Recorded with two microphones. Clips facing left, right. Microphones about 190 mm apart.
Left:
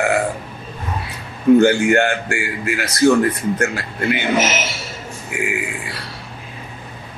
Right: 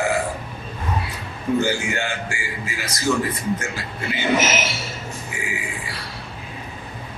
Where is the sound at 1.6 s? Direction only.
65° left (ahead or behind).